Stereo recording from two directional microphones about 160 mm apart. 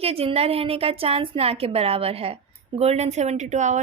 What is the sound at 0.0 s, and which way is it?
A woman's voice, 35° right (ahead or behind).